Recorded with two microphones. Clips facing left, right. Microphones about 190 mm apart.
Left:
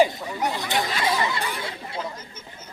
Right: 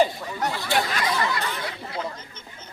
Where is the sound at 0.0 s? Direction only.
10° left (ahead or behind).